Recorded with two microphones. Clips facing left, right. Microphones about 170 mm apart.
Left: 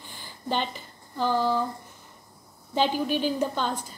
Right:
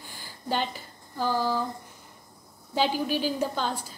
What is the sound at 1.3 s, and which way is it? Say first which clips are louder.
Speech: left 2 dB; 55° left (ahead or behind).